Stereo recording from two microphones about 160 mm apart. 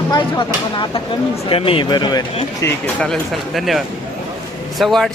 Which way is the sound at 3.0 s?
Centre (ahead or behind).